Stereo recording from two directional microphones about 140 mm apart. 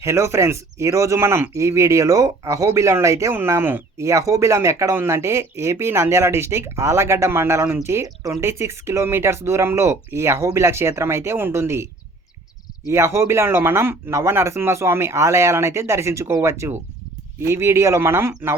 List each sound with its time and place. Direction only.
0.0 s speech: 20° right (ahead or behind)
12.9 s speech: 20° right (ahead or behind)